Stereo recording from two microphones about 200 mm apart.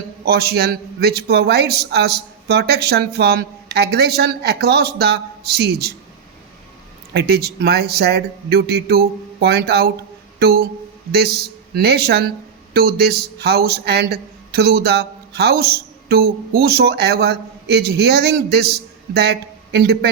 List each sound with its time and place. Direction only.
0.3 s a man's voice: 50° right (ahead or behind)
7.1 s a man's voice: 55° right (ahead or behind)